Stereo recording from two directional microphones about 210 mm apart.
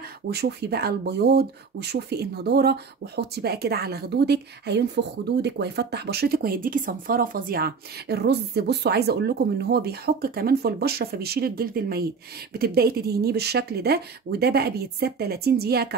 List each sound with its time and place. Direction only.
0.3 s speech: 50° right (ahead or behind)